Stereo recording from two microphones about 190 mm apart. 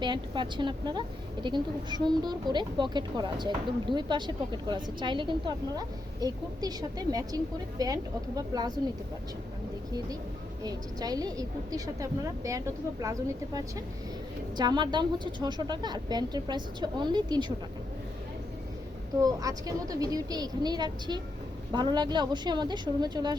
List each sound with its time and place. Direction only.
0.0 s a woman's voice: 25° right (ahead or behind)
10.6 s a woman's voice: 20° right (ahead or behind)
19.2 s a woman's voice: 20° right (ahead or behind)